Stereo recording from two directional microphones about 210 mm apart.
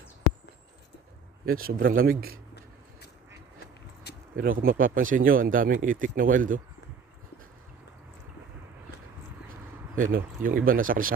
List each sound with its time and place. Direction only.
1.6 s a man's voice: 45° right (ahead or behind)
4.4 s speech: 40° right (ahead or behind)
9.9 s speech: 40° right (ahead or behind)